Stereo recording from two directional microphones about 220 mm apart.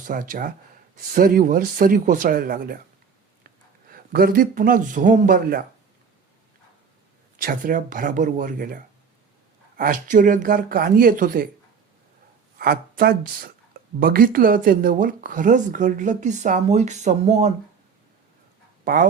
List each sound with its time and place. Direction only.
0.0 s speech: 35° right (ahead or behind)
3.8 s speech: 40° right (ahead or behind)
7.3 s speech: 40° right (ahead or behind)
12.5 s speech: 45° right (ahead or behind)
18.9 s speech: 40° right (ahead or behind)